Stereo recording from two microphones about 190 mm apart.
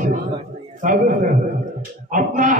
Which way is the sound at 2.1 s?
45° right (ahead or behind).